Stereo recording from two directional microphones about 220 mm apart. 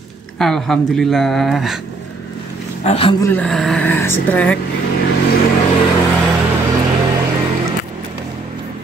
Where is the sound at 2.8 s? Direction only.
25° left (ahead or behind).